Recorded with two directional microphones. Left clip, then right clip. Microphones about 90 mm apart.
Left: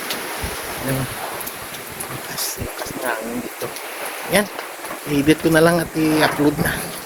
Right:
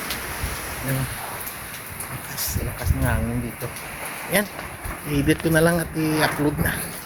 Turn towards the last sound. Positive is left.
turn(degrees=15)  # may be behind; listen again after turning